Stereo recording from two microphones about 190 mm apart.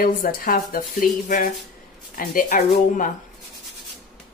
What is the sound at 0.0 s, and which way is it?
Speech, 50° left (ahead or behind).